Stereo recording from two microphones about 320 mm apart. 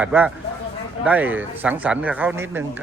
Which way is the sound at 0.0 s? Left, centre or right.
Centre.